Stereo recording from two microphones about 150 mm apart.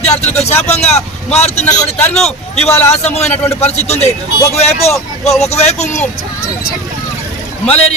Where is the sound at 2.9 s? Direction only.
45° left (ahead or behind).